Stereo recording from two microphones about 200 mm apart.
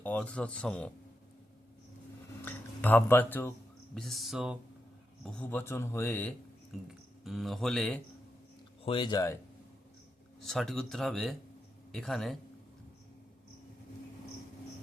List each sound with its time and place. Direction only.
0.0 s speech: 5° left (ahead or behind)
2.4 s a sound: 10° left (ahead or behind)
3.9 s speech: centre (ahead or behind)
6.8 s speech: centre (ahead or behind)
8.8 s speech: 25° left (ahead or behind)
10.4 s speech: centre (ahead or behind)